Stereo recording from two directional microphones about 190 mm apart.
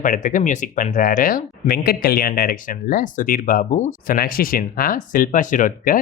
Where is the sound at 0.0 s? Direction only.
50° left (ahead or behind).